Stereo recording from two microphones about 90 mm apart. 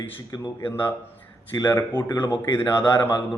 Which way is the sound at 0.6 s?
25° left (ahead or behind).